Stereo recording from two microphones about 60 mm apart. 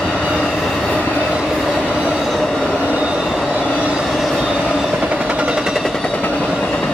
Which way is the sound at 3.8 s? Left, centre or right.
Centre.